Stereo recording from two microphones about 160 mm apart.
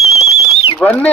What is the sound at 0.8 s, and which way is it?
Speech, 10° left (ahead or behind).